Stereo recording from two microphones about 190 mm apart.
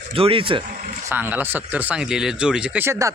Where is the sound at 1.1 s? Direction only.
10° right (ahead or behind).